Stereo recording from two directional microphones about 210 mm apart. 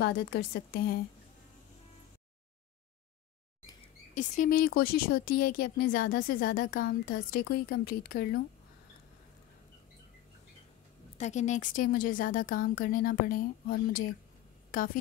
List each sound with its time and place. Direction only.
0.0 s speech: 50° left (ahead or behind)
4.1 s speech: 40° left (ahead or behind)
11.1 s speech: 35° left (ahead or behind)